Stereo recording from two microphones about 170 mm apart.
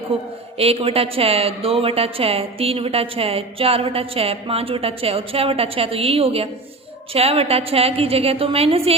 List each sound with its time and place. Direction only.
0.1 s speech: 35° right (ahead or behind)